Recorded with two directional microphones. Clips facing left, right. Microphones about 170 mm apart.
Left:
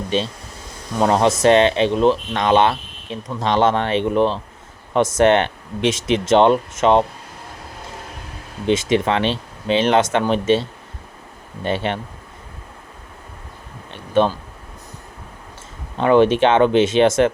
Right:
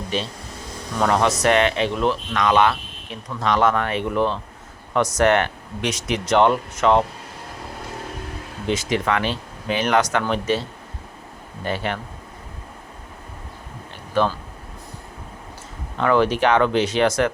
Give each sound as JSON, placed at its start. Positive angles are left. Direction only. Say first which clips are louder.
{"t": 0.1, "sound": "speech", "louder": "left 5 dB", "side_deg": 25}
{"t": 8.6, "sound": "speech", "louder": "left 5 dB", "side_deg": 25}
{"t": 13.9, "sound": "a sound", "louder": "left 4 dB", "side_deg": 20}
{"t": 16.0, "sound": "speech", "louder": "left 5 dB", "side_deg": 20}